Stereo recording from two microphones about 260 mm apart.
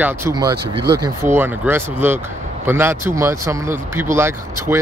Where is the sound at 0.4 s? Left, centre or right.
Centre.